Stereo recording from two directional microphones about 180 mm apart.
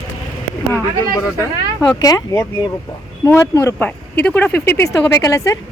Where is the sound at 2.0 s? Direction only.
20° left (ahead or behind).